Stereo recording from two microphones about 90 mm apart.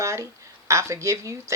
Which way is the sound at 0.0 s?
35° right (ahead or behind).